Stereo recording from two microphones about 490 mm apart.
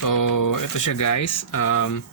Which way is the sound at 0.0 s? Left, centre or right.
Left.